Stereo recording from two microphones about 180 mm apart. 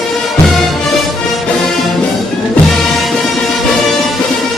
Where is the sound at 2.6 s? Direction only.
Centre (ahead or behind).